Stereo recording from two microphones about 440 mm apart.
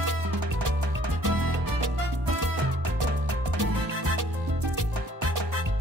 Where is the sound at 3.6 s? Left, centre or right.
Right.